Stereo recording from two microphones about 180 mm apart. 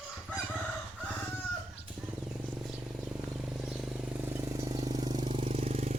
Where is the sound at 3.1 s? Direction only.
5° right (ahead or behind); by 5.9 s 35° right (ahead or behind).